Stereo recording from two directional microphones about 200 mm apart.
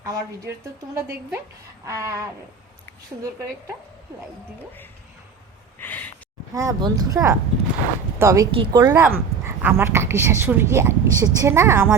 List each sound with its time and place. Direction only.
0.0 s a woman's voice: 15° right (ahead or behind)
5.8 s a sound: 10° left (ahead or behind)
6.5 s a woman's voice: 15° right (ahead or behind)